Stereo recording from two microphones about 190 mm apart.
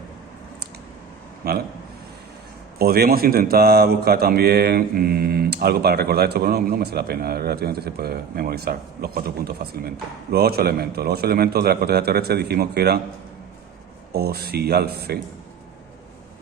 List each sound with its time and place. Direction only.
1.4 s a man's voice: 55° right (ahead or behind)
2.7 s a man's voice: 55° right (ahead or behind)
14.1 s a man's voice: 55° right (ahead or behind)